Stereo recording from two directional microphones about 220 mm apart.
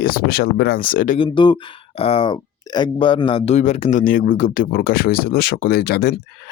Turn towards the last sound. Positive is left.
turn(degrees=50)  # may be behind; listen again after turning